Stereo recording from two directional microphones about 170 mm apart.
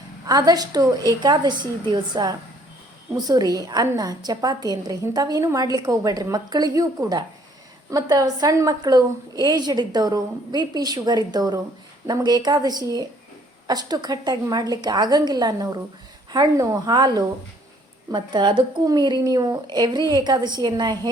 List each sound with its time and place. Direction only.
0.3 s a woman's voice: 25° right (ahead or behind)